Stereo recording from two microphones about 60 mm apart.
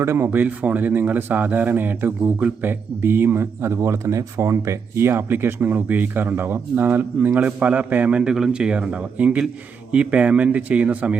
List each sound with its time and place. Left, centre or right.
0.0 s speech: right
0.3 s a man's voice: right